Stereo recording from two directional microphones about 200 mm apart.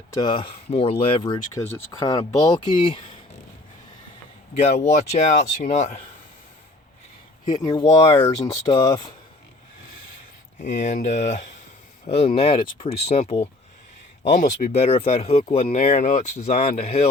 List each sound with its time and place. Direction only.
0.1 s speech: 20° left (ahead or behind)
4.5 s speech: 30° left (ahead or behind)
7.4 s speech: 20° left (ahead or behind)
10.6 s speech: 35° left (ahead or behind)